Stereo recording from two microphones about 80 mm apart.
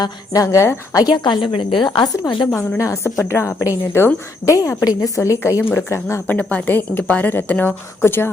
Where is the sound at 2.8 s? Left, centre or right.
Left.